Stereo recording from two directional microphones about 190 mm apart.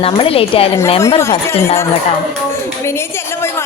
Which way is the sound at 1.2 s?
15° left (ahead or behind).